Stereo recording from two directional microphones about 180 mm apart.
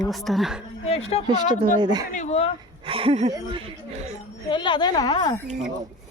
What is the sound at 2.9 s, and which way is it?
Speech, 30° right (ahead or behind).